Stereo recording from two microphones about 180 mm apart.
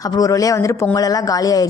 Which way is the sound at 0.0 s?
20° left (ahead or behind).